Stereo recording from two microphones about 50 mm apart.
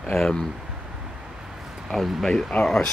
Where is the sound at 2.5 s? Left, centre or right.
Left.